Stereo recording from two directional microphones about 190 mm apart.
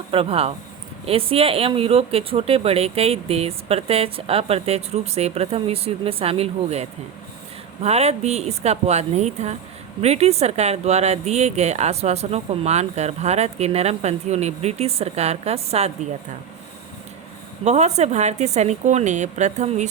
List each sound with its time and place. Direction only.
0.1 s speech: 30° right (ahead or behind)
17.6 s speech: 35° right (ahead or behind)